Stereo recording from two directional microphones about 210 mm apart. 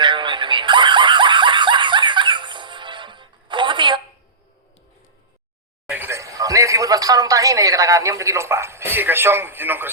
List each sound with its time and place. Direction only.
0.0 s snicker: 20° right (ahead or behind)
5.9 s speech: 10° right (ahead or behind)